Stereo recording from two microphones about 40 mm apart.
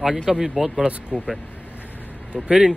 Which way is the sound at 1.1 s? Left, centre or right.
Right.